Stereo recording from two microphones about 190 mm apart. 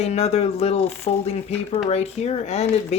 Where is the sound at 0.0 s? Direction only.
35° left (ahead or behind).